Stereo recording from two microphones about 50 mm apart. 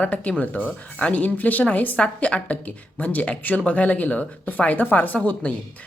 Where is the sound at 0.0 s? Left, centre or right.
Left.